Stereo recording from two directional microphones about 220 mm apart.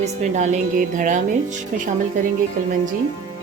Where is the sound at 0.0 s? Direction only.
30° right (ahead or behind).